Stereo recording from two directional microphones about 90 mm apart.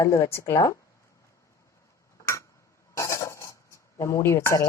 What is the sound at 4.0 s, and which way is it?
Speech, 35° left (ahead or behind).